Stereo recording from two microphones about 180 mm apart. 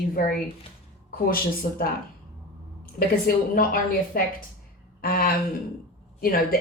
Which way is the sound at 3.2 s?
50° left (ahead or behind).